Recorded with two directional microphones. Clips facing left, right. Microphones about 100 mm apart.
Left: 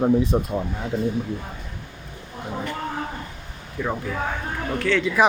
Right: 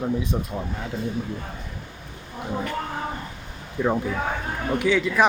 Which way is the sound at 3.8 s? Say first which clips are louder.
Right 4 dB; 30° right (ahead or behind).